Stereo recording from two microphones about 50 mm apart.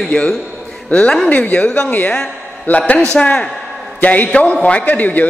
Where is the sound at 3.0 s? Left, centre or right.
Left.